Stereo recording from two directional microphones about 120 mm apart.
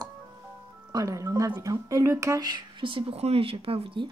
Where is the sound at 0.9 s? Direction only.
30° right (ahead or behind); by 4.1 s 45° right (ahead or behind).